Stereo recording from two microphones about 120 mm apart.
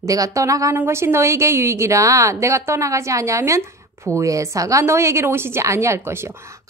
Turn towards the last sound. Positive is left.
turn(degrees=-20)  # may be behind; listen again after turning